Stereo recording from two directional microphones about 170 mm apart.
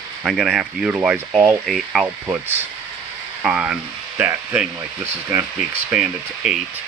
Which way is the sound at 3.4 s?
5° right (ahead or behind).